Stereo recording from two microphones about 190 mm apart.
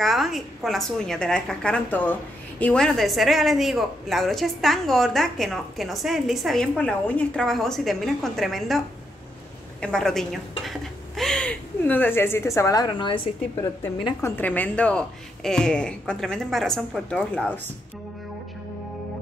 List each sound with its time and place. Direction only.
0.0 s a woman's voice: centre (ahead or behind); by 13.7 s 25° left (ahead or behind)
14.0 s a woman's voice: 10° left (ahead or behind)